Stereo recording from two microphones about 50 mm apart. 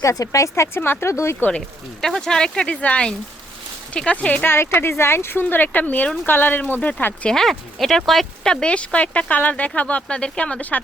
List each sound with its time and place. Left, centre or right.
0.0 s a woman's voice: left
0.8 s speech: left
1.5 s speech: centre
2.0 s speech: centre
2.6 s speech: left
4.4 s speech: left
7.3 s speech: centre
8.4 s speech: left